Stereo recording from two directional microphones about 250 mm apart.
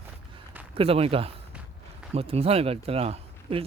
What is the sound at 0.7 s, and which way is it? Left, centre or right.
Speech, right.